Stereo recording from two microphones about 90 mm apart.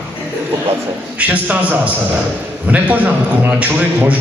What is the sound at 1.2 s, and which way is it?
A man's voice, 15° right (ahead or behind).